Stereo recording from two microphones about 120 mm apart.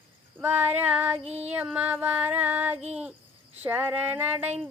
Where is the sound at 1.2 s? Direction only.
60° right (ahead or behind).